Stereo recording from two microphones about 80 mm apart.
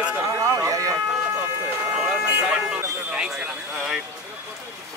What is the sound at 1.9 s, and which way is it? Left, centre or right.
Speech, centre.